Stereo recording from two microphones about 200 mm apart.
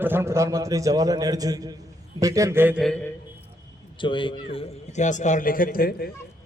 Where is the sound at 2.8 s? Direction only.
5° left (ahead or behind).